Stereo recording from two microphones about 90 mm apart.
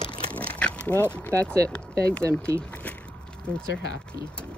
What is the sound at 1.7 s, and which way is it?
Speech, 15° left (ahead or behind).